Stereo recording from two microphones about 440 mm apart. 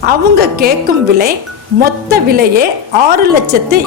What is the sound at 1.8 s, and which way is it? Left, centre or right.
A woman's voice, centre.